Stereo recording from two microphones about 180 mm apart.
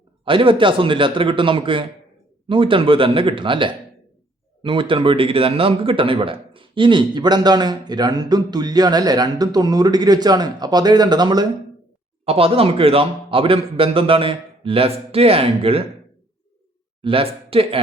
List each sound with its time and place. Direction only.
0.3 s speech: 30° right (ahead or behind)
12.2 s speech: 35° right (ahead or behind)
17.0 s speech: 30° right (ahead or behind)